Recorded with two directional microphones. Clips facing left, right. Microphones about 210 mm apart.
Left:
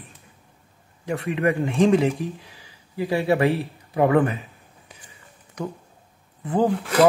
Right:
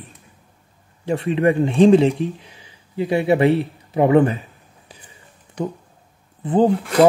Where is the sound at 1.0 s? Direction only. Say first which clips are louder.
Right 5 dB; 30° right (ahead or behind).